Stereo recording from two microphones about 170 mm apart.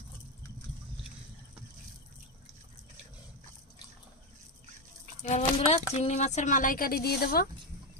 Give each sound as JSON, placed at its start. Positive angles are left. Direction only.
{"t": 5.2, "sound": "speech", "side_deg": 40}